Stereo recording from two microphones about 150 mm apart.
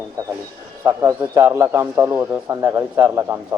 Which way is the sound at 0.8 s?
15° right (ahead or behind).